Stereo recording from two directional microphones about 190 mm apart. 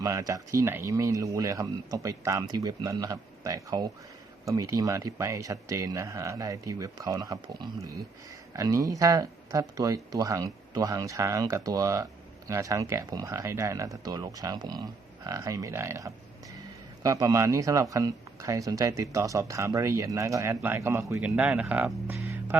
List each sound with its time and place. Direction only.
0.0 s speech: 15° right (ahead or behind)